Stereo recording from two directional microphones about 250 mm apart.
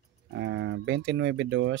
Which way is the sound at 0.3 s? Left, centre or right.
Right.